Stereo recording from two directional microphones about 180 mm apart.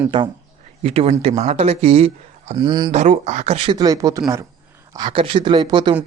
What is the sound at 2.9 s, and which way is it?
Speech, 40° right (ahead or behind).